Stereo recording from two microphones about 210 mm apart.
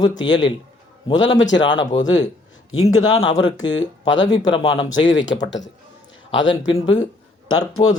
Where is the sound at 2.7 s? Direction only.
75° left (ahead or behind).